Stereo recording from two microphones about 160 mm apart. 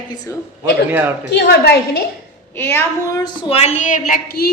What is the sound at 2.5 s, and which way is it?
Speech, 15° left (ahead or behind).